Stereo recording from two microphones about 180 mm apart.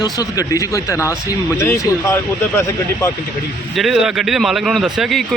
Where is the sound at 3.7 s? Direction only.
Centre (ahead or behind).